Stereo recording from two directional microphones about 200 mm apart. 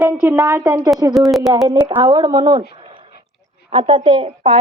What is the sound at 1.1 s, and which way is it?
Speech, centre (ahead or behind).